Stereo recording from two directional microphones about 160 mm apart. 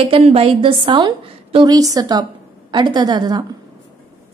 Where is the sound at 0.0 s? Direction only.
35° right (ahead or behind).